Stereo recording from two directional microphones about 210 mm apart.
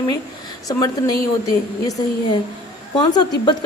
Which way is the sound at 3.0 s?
20° left (ahead or behind).